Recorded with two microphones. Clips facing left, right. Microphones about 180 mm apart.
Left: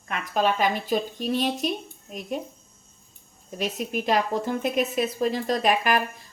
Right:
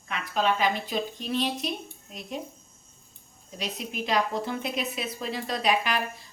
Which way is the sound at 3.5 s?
45° left (ahead or behind).